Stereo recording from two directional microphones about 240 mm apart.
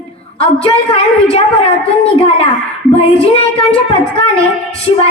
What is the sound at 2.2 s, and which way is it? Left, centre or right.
Speech, left.